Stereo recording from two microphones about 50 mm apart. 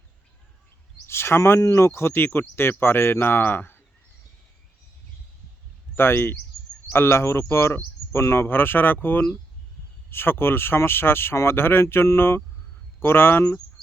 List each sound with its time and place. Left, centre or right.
1.0 s speech: left
6.0 s speech: left